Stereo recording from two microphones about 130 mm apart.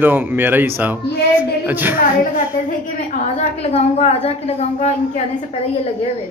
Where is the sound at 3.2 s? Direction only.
55° left (ahead or behind).